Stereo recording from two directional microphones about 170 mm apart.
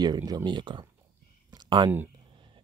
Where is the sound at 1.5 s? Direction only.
25° right (ahead or behind).